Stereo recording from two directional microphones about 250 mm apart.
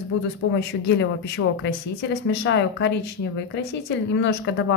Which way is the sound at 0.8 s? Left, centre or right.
Left.